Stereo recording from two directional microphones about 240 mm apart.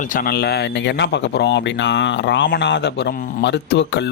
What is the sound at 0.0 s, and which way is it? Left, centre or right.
Speech, left.